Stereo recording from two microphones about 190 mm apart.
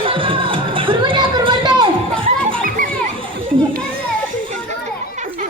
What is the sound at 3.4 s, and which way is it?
Children playing, 25° right (ahead or behind).